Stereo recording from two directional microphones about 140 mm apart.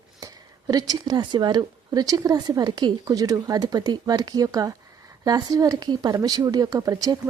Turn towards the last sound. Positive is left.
turn(degrees=-25)  # may be behind; listen again after turning